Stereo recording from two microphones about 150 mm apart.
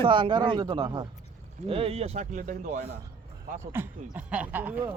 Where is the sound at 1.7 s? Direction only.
40° right (ahead or behind); by 2.8 s 60° right (ahead or behind).